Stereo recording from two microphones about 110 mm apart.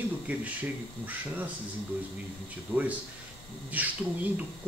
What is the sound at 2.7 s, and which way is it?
Speech, 15° right (ahead or behind).